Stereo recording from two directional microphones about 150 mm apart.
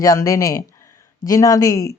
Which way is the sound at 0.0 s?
20° left (ahead or behind).